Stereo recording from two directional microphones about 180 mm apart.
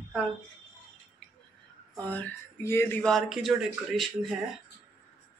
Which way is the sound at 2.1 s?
10° left (ahead or behind).